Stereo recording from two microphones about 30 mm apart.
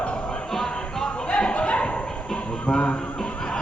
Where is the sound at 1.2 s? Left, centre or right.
Left.